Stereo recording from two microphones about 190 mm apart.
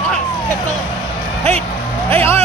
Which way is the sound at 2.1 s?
10° left (ahead or behind).